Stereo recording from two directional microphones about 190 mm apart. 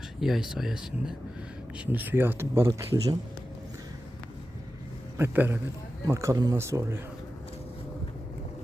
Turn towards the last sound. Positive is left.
turn(degrees=-15)  # may be behind; listen again after turning